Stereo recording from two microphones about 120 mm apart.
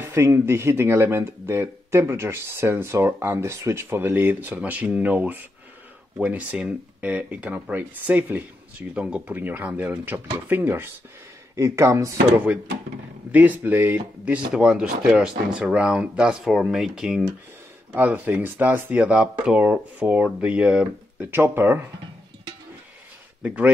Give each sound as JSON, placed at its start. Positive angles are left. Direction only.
{"t": 0.0, "sound": "speech", "side_deg": -20}
{"t": 13.3, "sound": "speech", "side_deg": -15}
{"t": 21.2, "sound": "speech", "side_deg": -20}
{"t": 23.4, "sound": "speech", "side_deg": -10}